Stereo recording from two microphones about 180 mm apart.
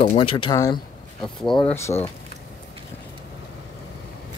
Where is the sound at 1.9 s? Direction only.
25° left (ahead or behind).